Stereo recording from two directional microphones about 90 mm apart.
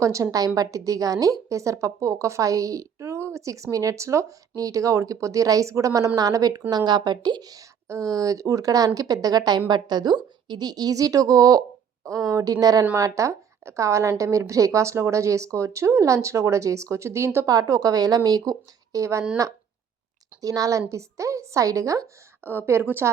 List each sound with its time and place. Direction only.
0.0 s a woman's voice: 35° right (ahead or behind)
17.5 s a woman's voice: 40° right (ahead or behind)
20.4 s a woman's voice: 40° right (ahead or behind); by 23.0 s 25° right (ahead or behind)